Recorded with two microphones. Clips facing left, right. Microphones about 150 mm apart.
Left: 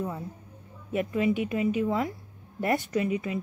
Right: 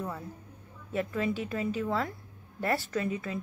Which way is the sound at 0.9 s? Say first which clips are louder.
Left 5 dB; 15° left (ahead or behind).